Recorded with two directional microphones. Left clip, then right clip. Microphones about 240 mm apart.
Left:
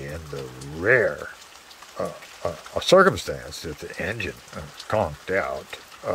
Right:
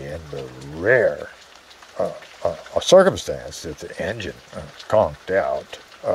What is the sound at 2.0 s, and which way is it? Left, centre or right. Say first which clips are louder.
Frying: right 5 dB; centre.